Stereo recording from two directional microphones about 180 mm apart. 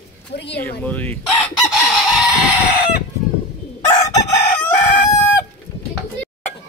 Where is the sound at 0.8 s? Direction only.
10° left (ahead or behind).